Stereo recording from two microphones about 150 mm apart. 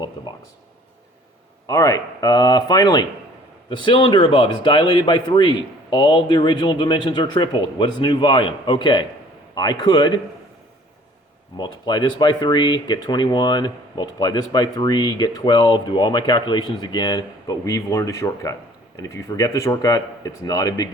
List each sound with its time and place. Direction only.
1.6 s speech: 25° left (ahead or behind)
11.5 s speech: 30° left (ahead or behind)